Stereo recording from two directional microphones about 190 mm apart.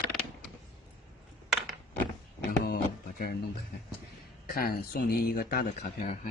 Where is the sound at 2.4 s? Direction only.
50° left (ahead or behind).